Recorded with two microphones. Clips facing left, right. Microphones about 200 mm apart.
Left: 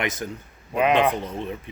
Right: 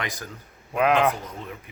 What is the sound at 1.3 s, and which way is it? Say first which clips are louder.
Speech: left 7 dB; 25° left (ahead or behind).